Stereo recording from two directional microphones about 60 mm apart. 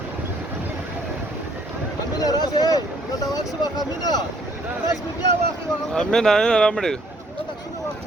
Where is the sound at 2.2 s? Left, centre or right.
Left.